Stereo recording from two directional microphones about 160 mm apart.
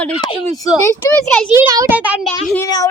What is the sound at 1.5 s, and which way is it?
Speech, 20° right (ahead or behind).